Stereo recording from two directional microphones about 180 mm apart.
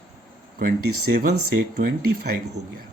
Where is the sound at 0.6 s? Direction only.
55° right (ahead or behind).